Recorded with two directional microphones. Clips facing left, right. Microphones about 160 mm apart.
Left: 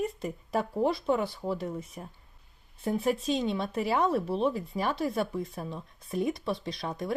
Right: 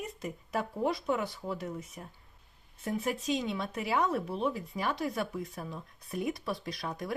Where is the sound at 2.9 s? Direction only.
30° left (ahead or behind).